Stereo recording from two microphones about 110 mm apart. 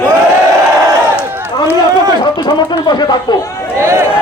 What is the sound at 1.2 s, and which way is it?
Run, 20° right (ahead or behind).